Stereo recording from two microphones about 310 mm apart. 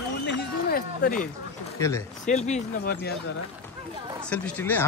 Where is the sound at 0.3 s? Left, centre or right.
Left.